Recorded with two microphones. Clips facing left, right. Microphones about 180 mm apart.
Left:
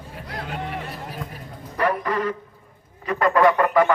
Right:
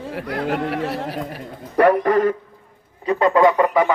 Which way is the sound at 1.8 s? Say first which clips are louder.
Right 8 dB; 55° right (ahead or behind).